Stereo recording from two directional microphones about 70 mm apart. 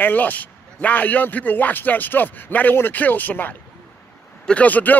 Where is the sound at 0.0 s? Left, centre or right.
Left.